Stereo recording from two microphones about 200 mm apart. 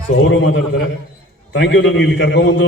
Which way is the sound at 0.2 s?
65° left (ahead or behind).